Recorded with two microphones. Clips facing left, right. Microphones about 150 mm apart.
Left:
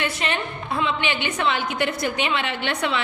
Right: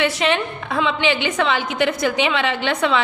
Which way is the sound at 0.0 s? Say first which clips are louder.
Right 7 dB; 90° right.